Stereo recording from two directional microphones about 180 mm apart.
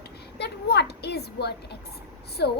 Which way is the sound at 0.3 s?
65° left (ahead or behind).